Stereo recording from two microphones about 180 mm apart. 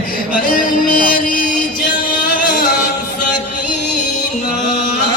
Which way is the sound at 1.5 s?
50° left (ahead or behind).